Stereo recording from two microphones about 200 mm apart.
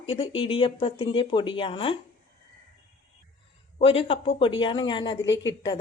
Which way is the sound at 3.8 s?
30° left (ahead or behind).